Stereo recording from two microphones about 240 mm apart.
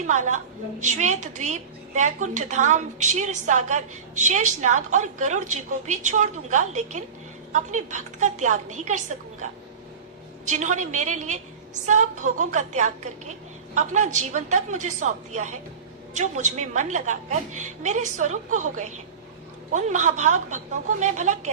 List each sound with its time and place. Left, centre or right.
0.1 s a woman's voice: right
10.4 s a woman's voice: right